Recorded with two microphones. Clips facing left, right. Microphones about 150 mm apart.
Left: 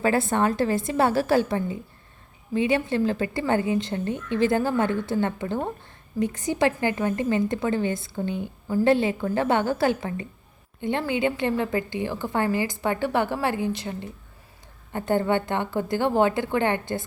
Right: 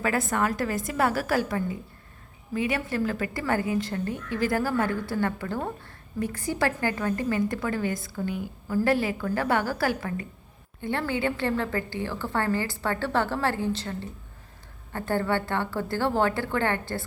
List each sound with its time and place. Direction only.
0.0 s a woman's voice: 30° left (ahead or behind)